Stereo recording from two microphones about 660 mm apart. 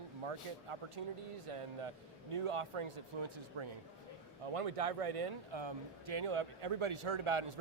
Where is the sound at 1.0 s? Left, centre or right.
Right.